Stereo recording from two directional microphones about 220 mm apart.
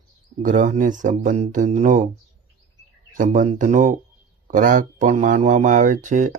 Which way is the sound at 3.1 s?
35° right (ahead or behind).